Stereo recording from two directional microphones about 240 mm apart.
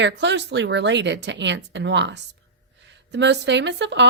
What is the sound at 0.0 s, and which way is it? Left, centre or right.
Speech, right.